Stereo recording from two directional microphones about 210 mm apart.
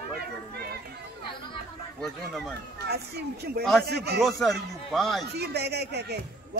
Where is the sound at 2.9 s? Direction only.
50° right (ahead or behind).